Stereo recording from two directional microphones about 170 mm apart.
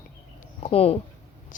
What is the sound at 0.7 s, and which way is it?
Speech, 35° left (ahead or behind).